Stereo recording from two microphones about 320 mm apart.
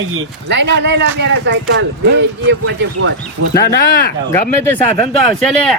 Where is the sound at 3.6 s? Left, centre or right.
Left.